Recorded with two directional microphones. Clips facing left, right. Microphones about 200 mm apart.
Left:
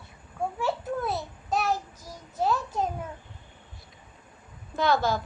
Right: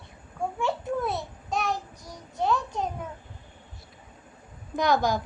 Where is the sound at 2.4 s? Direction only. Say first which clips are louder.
Even; 5° left (ahead or behind).